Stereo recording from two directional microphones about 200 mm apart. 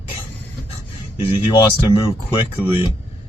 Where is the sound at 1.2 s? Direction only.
25° left (ahead or behind).